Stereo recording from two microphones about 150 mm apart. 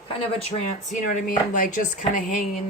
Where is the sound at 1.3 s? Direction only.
60° left (ahead or behind).